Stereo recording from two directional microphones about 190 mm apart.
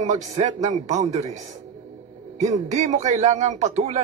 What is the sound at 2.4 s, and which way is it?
Speech, 35° right (ahead or behind).